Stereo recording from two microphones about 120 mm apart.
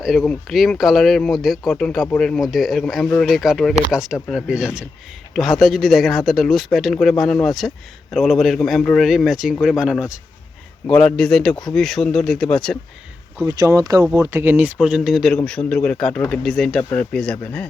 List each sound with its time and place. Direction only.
0.0 s speech: centre (ahead or behind)
10.8 s speech: 5° left (ahead or behind)
13.4 s speech: 25° right (ahead or behind); by 17.7 s 10° left (ahead or behind)